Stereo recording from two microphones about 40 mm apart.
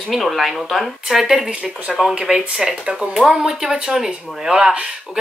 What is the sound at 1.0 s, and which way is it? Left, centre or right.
Speech, centre.